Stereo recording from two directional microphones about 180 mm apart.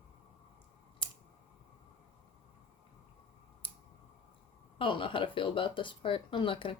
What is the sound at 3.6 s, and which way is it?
Scissors, 30° left (ahead or behind).